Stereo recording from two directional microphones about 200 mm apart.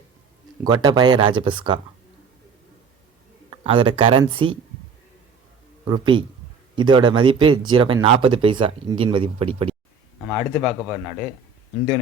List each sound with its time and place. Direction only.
0.6 s speech: 20° right (ahead or behind)
3.5 s speech: 25° right (ahead or behind)
5.8 s speech: 25° right (ahead or behind)
10.2 s speech: 5° right (ahead or behind)